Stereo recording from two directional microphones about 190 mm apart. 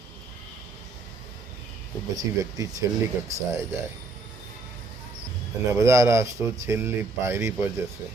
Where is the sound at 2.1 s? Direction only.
20° right (ahead or behind).